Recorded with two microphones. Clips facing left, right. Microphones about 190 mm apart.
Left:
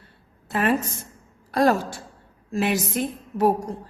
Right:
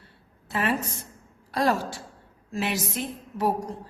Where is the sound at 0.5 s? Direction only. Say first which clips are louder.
Left 4 dB; 50° left (ahead or behind).